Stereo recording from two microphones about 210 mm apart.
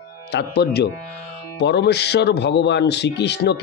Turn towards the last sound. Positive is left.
turn(degrees=55)  # may be behind; listen again after turning